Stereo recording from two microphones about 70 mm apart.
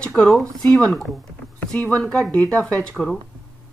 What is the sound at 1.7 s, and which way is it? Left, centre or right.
Speech, centre.